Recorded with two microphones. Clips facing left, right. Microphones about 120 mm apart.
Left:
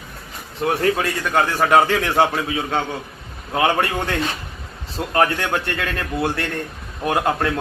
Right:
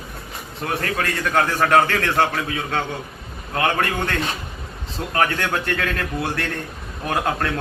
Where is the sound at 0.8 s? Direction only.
10° left (ahead or behind).